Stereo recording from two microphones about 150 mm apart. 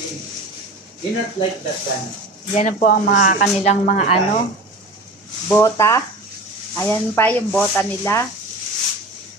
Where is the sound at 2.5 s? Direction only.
55° left (ahead or behind).